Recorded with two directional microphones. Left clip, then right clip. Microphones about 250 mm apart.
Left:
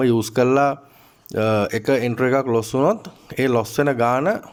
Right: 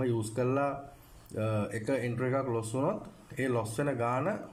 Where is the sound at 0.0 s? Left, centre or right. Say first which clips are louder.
Left 14 dB; left.